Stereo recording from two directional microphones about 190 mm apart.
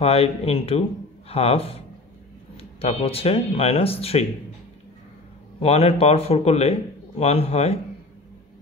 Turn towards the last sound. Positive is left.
turn(degrees=35)  # may be behind; listen again after turning